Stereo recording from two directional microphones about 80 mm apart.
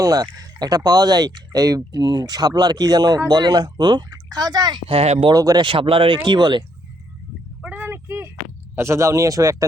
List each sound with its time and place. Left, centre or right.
0.0 s speech: right
5.3 s speech: right
5.5 s speech: right
7.6 s a sound: right
8.7 s speech: right